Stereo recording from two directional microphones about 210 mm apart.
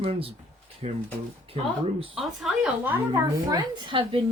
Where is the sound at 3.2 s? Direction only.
15° right (ahead or behind).